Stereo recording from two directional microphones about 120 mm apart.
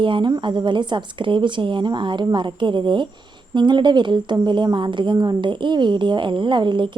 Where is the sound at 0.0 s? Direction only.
45° right (ahead or behind).